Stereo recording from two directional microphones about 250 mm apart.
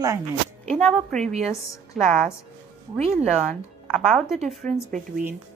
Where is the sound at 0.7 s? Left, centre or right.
Centre.